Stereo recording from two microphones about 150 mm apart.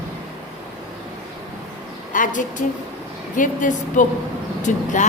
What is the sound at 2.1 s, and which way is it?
A woman's voice, 60° left (ahead or behind).